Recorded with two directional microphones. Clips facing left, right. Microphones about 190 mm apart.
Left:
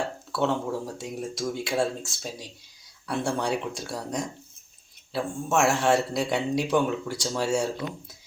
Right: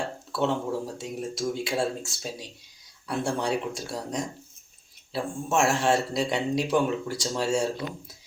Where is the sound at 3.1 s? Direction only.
Centre (ahead or behind).